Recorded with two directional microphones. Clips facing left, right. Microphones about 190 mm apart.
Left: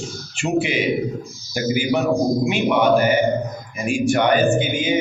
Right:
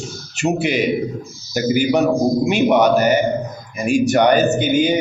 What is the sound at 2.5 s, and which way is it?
A man's voice, 40° right (ahead or behind).